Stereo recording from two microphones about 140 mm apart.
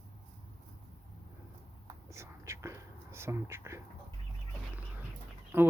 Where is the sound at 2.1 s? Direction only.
20° right (ahead or behind).